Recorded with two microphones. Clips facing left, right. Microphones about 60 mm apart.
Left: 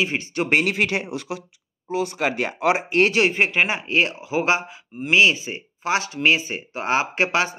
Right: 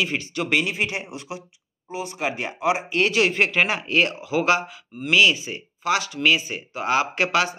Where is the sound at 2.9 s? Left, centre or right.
Left.